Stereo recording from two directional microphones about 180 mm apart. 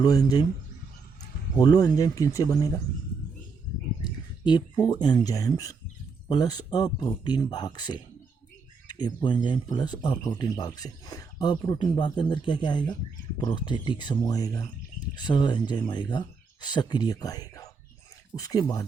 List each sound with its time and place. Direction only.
0.0 s speech: 20° left (ahead or behind)
1.5 s speech: 20° left (ahead or behind)
4.0 s a sound: 25° left (ahead or behind)
4.9 s speech: 25° left (ahead or behind)